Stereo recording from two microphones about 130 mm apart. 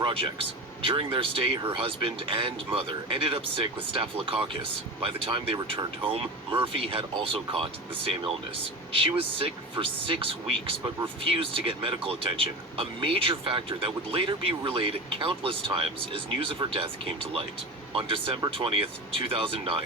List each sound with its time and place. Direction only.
0.0 s speech: 45° right (ahead or behind)